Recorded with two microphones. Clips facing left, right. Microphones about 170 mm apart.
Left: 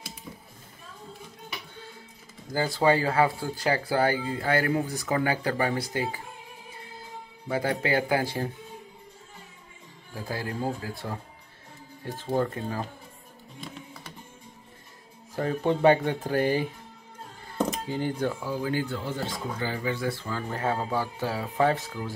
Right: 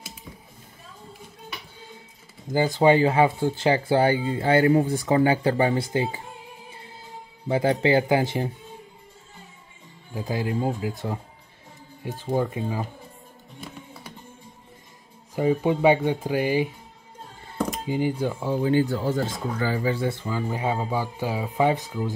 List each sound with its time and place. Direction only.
2.5 s speech: 20° right (ahead or behind)
7.4 s speech: 25° right (ahead or behind)
10.1 s speech: 20° right (ahead or behind)
15.3 s speech: 10° right (ahead or behind)
17.8 s speech: 10° right (ahead or behind)
18.4 s speech: 25° right (ahead or behind)
19.0 s speech: 45° right (ahead or behind); by 22.1 s 15° right (ahead or behind)